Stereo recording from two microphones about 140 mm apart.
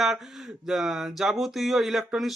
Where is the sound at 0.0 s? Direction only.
Centre (ahead or behind).